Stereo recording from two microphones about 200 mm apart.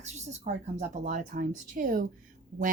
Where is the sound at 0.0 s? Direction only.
35° right (ahead or behind).